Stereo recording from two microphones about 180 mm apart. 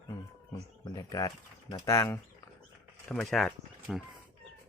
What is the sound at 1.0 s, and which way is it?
Speech, 15° left (ahead or behind).